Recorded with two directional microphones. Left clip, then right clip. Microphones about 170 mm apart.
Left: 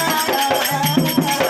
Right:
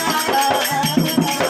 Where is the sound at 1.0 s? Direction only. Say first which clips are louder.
Left 1 dB; centre (ahead or behind).